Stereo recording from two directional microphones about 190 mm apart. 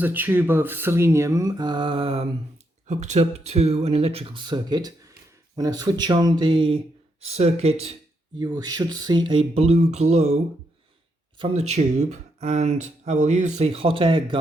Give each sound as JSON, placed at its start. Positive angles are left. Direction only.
{"t": 0.0, "sound": "speech", "side_deg": -10}
{"t": 8.4, "sound": "speech", "side_deg": -20}
{"t": 11.3, "sound": "speech", "side_deg": -30}